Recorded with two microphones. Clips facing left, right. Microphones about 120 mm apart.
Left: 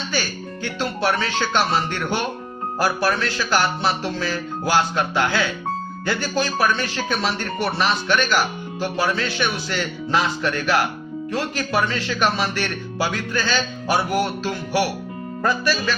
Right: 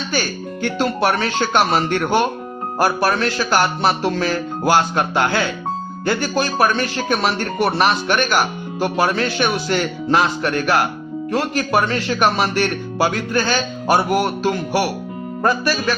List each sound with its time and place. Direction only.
0.1 s speech: 50° right (ahead or behind)